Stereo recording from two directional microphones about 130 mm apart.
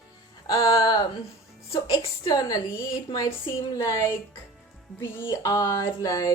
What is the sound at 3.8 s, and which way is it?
A woman's voice, 25° left (ahead or behind).